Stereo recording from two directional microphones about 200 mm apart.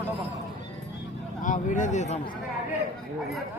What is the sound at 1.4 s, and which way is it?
Speech, 40° left (ahead or behind).